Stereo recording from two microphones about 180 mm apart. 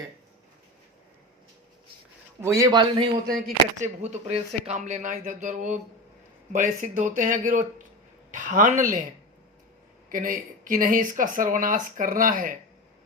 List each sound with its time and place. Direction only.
2.4 s speech: 15° right (ahead or behind)
3.8 s speech: 40° right (ahead or behind)
10.1 s speech: 50° right (ahead or behind)